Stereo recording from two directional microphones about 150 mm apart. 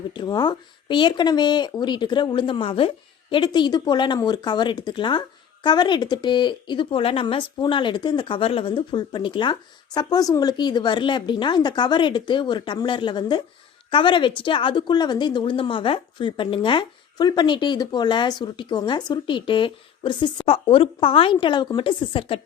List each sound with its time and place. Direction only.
0.1 s a woman's voice: 30° left (ahead or behind)